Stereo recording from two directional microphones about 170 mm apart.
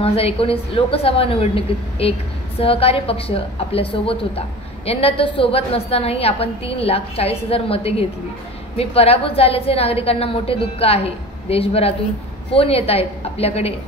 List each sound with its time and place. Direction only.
0.0 s a woman's voice: 35° left (ahead or behind)